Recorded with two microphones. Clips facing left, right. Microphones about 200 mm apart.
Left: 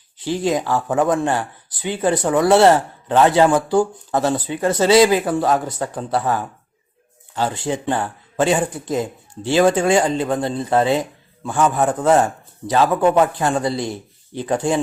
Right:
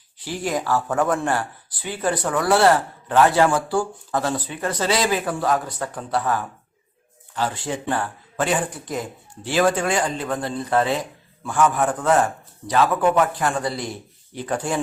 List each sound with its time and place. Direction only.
0.3 s speech: 20° left (ahead or behind)